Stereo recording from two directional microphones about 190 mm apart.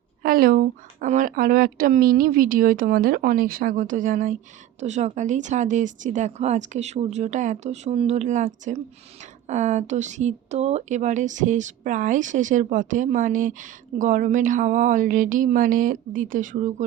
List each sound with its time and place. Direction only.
0.2 s speech: 50° right (ahead or behind)